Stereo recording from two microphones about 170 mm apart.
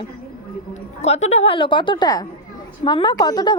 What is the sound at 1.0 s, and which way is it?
A woman's voice, 40° left (ahead or behind).